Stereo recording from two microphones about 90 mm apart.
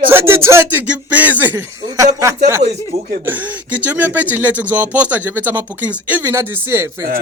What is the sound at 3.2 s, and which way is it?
Speech, 20° right (ahead or behind).